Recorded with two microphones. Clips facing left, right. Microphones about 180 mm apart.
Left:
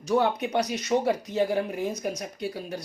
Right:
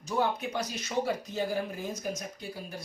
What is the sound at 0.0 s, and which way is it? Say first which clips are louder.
Speech: left 6 dB; 70° left (ahead or behind).